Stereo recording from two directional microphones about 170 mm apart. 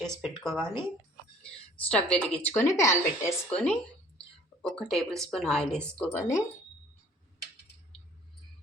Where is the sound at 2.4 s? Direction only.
15° left (ahead or behind).